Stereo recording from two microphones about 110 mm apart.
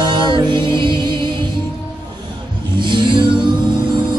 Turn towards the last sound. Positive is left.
turn(degrees=-45)  # may be behind; listen again after turning